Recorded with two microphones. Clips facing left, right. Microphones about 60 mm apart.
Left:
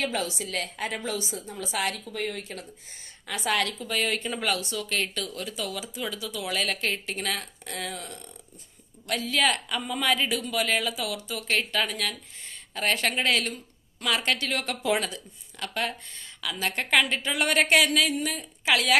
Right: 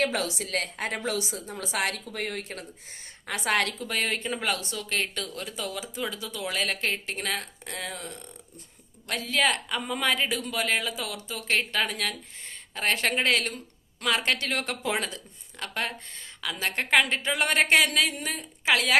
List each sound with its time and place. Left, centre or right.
0.0 s a woman's voice: right
4.2 s speech: right
4.5 s speech: right